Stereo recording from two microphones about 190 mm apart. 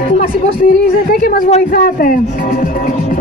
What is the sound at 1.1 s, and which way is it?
Speech, 55° left (ahead or behind).